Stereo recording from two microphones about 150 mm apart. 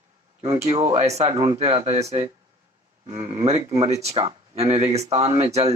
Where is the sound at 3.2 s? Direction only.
40° right (ahead or behind).